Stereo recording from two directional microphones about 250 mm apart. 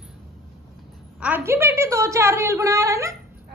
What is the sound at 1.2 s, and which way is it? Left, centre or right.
A woman's voice, centre.